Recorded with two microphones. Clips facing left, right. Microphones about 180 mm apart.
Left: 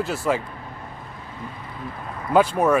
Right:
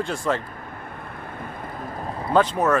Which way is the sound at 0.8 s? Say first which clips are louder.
Right 2 dB; 60° right (ahead or behind).